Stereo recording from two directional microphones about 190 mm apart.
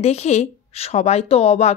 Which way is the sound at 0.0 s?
35° left (ahead or behind).